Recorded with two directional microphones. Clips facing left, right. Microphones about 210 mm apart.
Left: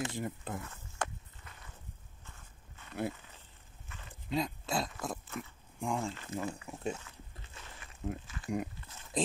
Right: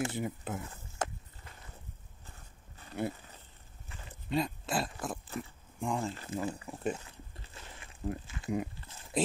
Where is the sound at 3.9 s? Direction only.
30° right (ahead or behind).